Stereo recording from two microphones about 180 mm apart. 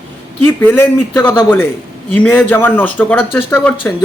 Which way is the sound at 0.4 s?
10° left (ahead or behind).